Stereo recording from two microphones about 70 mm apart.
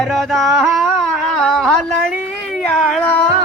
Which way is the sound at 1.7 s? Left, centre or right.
Centre.